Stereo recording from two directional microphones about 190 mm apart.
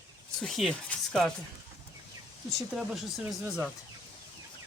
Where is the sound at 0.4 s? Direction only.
Centre (ahead or behind).